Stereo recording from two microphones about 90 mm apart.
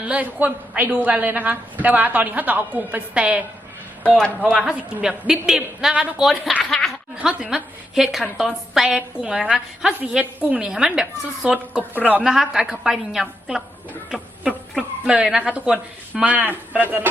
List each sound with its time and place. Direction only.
0.0 s a woman's voice: 15° right (ahead or behind)
4.6 s a woman's voice: 10° right (ahead or behind); by 6.9 s 5° left (ahead or behind)
7.2 s a woman's voice: 10° right (ahead or behind)
12.2 s a woman's voice: 5° right (ahead or behind)